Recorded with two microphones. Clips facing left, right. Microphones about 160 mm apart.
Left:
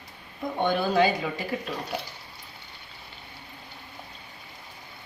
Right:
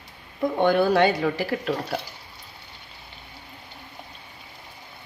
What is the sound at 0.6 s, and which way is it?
Speech, 65° right (ahead or behind).